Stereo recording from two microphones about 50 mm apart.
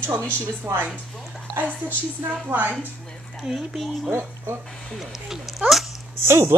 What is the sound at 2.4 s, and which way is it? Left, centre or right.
Speech, right.